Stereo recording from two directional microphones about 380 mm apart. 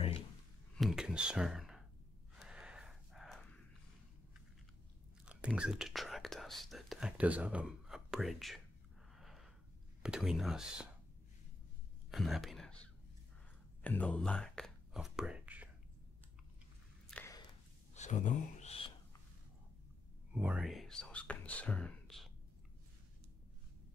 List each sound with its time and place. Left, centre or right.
0.7 s speech: centre
2.3 s horse: centre
5.2 s speech: centre
9.1 s a sound: centre
10.0 s speech: centre
12.1 s whispering: centre
13.8 s speech: centre
17.1 s walk: centre
17.9 s a sound: centre
20.3 s speech: centre